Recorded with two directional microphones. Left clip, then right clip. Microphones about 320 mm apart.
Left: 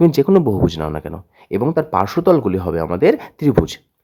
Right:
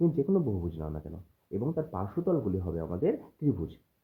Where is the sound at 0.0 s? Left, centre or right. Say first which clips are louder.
Left 15 dB; left.